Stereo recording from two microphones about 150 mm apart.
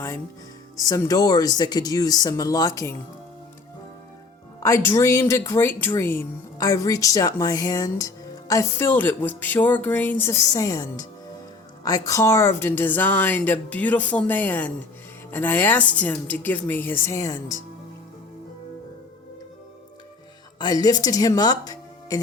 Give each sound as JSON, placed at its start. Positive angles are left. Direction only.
{"t": 0.9, "sound": "speech", "side_deg": 20}
{"t": 4.6, "sound": "speech", "side_deg": 20}
{"t": 20.6, "sound": "speech", "side_deg": 25}